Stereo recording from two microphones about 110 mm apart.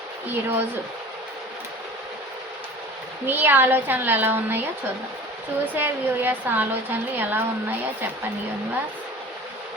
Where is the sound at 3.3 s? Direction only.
20° right (ahead or behind).